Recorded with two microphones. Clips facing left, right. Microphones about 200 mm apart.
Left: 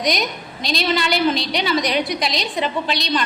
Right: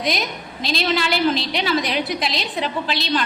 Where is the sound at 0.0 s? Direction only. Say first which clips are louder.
Left 2 dB; centre (ahead or behind).